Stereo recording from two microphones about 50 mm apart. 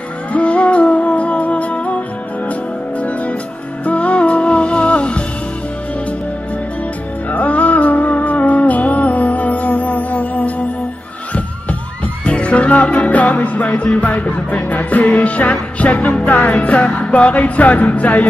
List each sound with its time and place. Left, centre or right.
0.3 s music: left
3.0 s music: left
7.2 s music: left
12.3 s music: left